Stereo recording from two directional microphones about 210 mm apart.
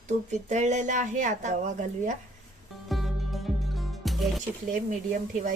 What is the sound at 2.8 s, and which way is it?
Music, centre (ahead or behind).